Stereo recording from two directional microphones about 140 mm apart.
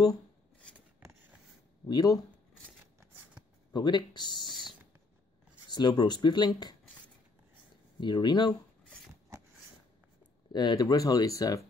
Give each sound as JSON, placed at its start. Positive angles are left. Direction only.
{"t": 1.9, "sound": "speech", "side_deg": 30}
{"t": 3.7, "sound": "speech", "side_deg": 30}
{"t": 5.7, "sound": "speech", "side_deg": 30}
{"t": 8.0, "sound": "speech", "side_deg": 30}
{"t": 10.5, "sound": "speech", "side_deg": 30}